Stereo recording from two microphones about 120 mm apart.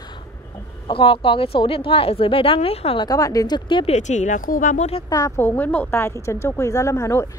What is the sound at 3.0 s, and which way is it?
Speech, 30° left (ahead or behind).